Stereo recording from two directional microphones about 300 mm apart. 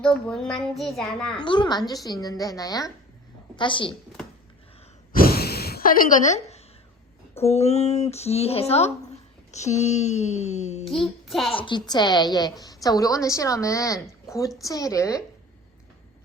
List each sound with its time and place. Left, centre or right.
0.0 s a child's voice: centre
1.4 s a woman's voice: centre
5.1 s gasp: left
7.4 s speech: left
10.9 s a child's voice: centre
11.5 s a woman's voice: centre